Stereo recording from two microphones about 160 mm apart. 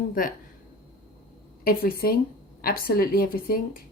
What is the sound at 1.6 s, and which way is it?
Speech, 70° left (ahead or behind).